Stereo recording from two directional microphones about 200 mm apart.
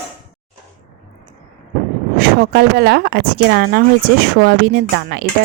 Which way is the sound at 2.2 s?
50° right (ahead or behind).